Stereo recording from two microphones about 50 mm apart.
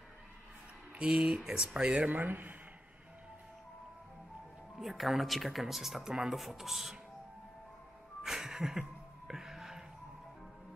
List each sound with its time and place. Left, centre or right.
1.0 s speech: centre
2.0 s speech: right
4.7 s speech: centre
8.2 s music: centre